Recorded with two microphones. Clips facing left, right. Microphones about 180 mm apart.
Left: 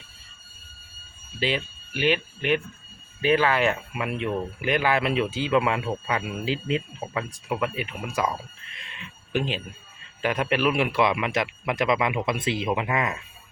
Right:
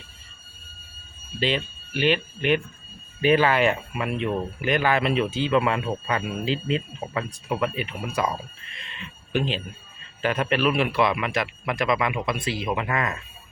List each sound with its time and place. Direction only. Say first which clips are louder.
1.4 s a man's voice: right 2 dB; 5° left (ahead or behind)
8.8 s a sound: right 3 dB; 10° left (ahead or behind)
10.2 s a man's voice: right 1 dB; 10° left (ahead or behind)
12.7 s a man's voice: even; 15° left (ahead or behind)